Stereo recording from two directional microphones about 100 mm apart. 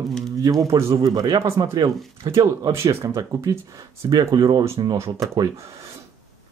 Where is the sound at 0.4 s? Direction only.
35° right (ahead or behind).